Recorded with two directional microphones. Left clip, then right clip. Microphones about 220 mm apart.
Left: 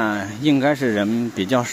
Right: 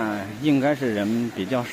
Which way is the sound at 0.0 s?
20° left (ahead or behind).